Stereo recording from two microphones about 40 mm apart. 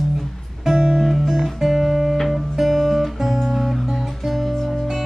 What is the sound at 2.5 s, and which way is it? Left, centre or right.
Guitar, centre.